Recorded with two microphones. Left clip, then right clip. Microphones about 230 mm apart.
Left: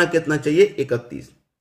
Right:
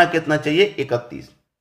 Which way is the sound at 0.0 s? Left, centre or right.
Centre.